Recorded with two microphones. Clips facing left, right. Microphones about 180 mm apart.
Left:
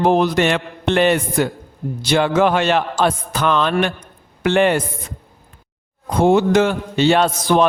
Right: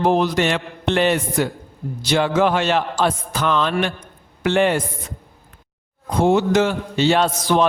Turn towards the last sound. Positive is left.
turn(degrees=55)  # may be behind; listen again after turning